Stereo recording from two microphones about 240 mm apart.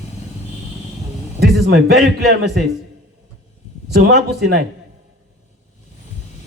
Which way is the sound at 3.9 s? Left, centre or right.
Right.